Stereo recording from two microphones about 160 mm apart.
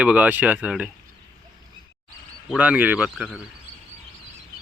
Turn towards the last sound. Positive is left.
turn(degrees=-10)  # may be behind; listen again after turning